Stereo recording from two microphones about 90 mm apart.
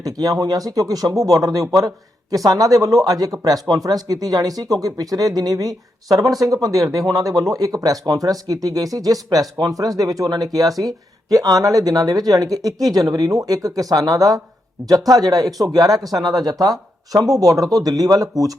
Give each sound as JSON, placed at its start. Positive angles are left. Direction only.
{"t": 0.0, "sound": "speech", "side_deg": -45}
{"t": 10.7, "sound": "speech", "side_deg": 0}
{"t": 11.3, "sound": "speech", "side_deg": -40}